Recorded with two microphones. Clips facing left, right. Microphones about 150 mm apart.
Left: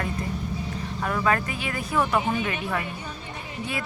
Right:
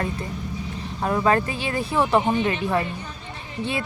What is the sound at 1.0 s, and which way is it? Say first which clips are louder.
A woman's voice: right 4 dB; 30° right (ahead or behind).